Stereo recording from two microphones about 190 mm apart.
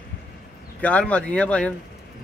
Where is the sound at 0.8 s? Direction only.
5° left (ahead or behind).